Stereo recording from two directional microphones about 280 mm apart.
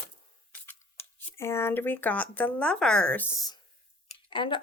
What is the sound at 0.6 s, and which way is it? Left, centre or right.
Speech, centre.